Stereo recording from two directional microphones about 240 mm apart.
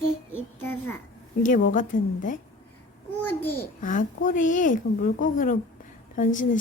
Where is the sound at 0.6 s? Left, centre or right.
Centre.